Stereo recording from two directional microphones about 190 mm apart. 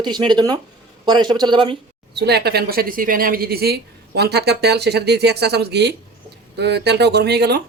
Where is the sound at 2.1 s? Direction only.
60° right (ahead or behind).